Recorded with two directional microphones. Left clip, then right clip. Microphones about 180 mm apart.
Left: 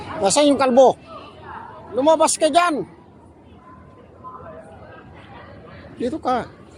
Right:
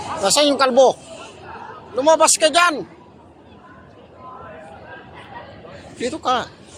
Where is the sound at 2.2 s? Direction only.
45° left (ahead or behind).